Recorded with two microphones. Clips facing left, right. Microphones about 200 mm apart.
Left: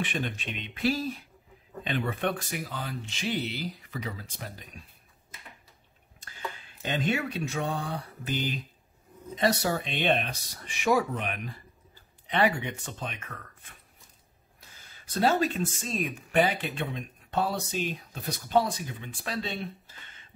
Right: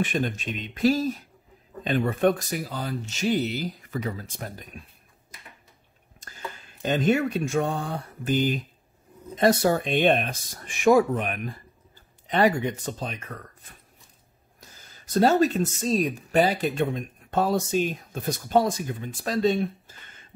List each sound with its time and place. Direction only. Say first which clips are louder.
0.0 s speech: right 6 dB; 45° right (ahead or behind)
6.1 s speech: even; 45° right (ahead or behind)
15.1 s speech: right 6 dB; 40° right (ahead or behind)